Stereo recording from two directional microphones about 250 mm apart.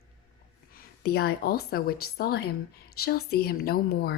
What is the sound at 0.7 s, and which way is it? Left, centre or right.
Speech, left.